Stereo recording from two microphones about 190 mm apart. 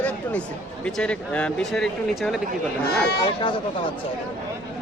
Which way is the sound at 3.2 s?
25° left (ahead or behind).